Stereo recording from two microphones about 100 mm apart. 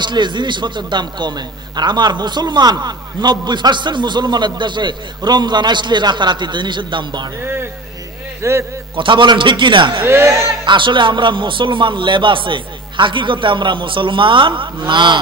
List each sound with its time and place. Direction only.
0.0 s a man's voice: 50° right (ahead or behind)
8.4 s speech: 30° right (ahead or behind)
8.9 s a man's voice: 55° right (ahead or behind)
10.0 s a man's voice: 25° right (ahead or behind)
10.6 s speech: 50° right (ahead or behind)